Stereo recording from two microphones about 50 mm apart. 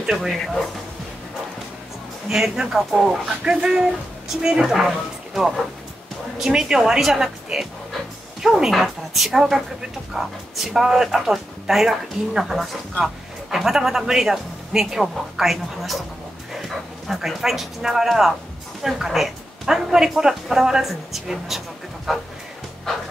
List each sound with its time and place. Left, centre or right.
0.1 s a woman's voice: centre
2.2 s speech: centre
3.4 s speech: centre
8.4 s a woman's voice: centre
17.1 s a woman's voice: centre